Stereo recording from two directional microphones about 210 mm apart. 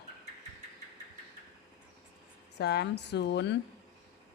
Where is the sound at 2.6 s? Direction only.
50° left (ahead or behind).